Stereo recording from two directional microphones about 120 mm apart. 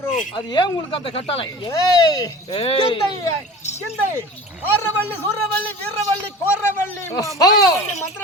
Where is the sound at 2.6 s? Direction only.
50° left (ahead or behind).